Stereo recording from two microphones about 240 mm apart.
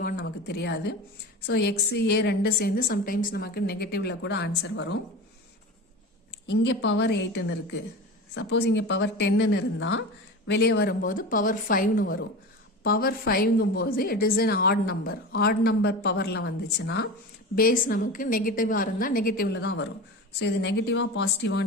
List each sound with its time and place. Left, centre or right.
0.0 s a sound: left
1.5 s a woman's voice: left
6.5 s a woman's voice: left